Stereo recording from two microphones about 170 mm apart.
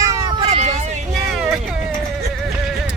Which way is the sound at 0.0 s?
20° right (ahead or behind).